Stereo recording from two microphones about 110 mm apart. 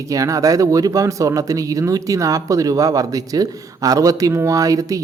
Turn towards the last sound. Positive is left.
turn(degrees=-30)  # may be behind; listen again after turning